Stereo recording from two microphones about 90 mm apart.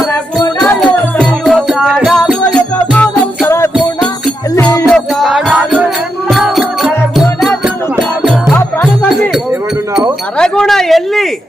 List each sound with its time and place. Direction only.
1.5 s music: centre (ahead or behind)
2.5 s music: 15° left (ahead or behind)
3.4 s music: 30° left (ahead or behind)
4.9 s music: centre (ahead or behind)
10.3 s a sound: 10° left (ahead or behind)